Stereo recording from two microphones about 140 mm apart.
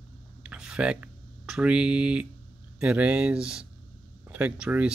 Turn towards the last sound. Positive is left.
turn(degrees=-10)  # may be behind; listen again after turning